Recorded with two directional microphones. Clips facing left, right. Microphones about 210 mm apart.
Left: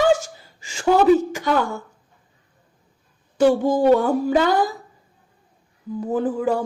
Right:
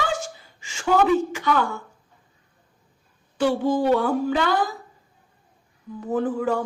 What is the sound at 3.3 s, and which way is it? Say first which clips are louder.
A woman's voice: left 4 dB; 45° left (ahead or behind).